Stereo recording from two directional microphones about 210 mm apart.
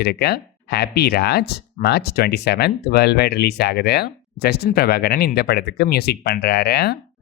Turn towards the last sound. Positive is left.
turn(degrees=50)  # may be behind; listen again after turning